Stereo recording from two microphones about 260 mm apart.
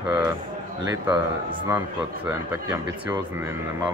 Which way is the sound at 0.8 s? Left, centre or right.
Centre.